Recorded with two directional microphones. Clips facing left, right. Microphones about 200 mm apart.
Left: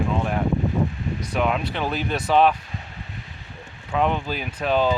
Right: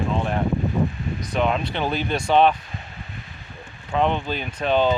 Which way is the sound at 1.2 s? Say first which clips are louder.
Right 1 dB; 10° left (ahead or behind).